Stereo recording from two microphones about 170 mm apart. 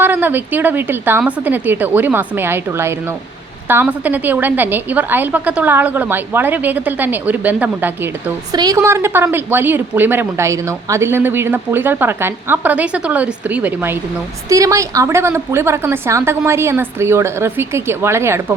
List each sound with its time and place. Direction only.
0.0 s speech: 10° right (ahead or behind)